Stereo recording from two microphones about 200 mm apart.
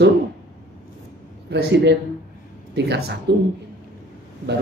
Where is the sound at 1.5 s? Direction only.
60° right (ahead or behind).